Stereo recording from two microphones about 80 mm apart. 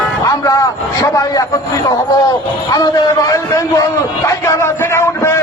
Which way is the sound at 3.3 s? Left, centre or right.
Left.